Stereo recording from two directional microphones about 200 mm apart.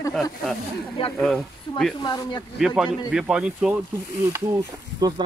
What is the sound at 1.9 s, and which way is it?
Speech, 20° left (ahead or behind).